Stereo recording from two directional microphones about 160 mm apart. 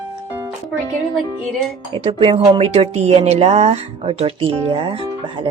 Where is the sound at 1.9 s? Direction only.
35° right (ahead or behind).